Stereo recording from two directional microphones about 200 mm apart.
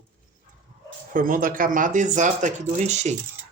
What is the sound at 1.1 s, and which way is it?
Speech, 45° right (ahead or behind).